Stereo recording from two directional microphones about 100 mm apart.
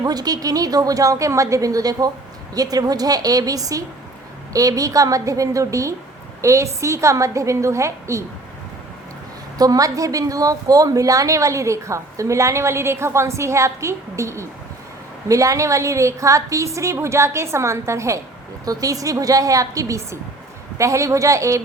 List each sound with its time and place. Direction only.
0.0 s a woman's voice: 40° right (ahead or behind)
9.6 s a woman's voice: 35° right (ahead or behind)